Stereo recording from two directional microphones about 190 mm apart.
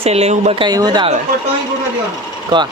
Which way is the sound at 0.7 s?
20° right (ahead or behind).